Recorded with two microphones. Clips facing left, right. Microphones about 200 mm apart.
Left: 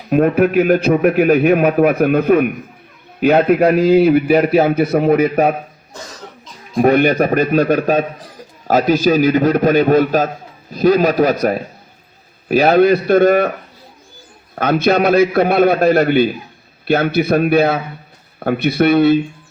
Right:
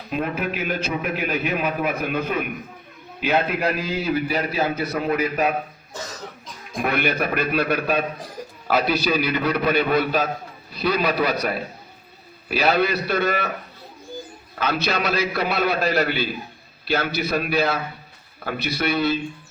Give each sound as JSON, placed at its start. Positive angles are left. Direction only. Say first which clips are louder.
{"t": 0.1, "sound": "a man's voice", "louder": "left 13 dB", "side_deg": 55}
{"t": 6.8, "sound": "a man's voice", "louder": "left 11 dB", "side_deg": 40}
{"t": 14.6, "sound": "a man's voice", "louder": "left 10 dB", "side_deg": 50}